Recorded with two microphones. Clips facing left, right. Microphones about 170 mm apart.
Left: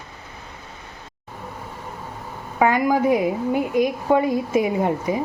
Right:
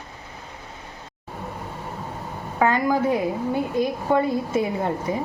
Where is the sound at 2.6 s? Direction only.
15° left (ahead or behind).